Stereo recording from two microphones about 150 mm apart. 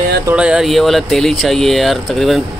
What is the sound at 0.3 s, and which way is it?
Speech, 5° right (ahead or behind).